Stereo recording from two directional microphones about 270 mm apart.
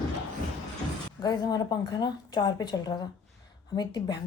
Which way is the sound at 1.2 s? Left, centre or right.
Centre.